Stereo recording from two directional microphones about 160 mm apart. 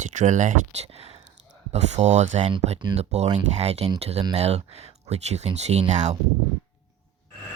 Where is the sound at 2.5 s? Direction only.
30° right (ahead or behind).